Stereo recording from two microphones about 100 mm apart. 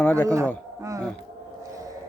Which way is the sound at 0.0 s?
10° left (ahead or behind).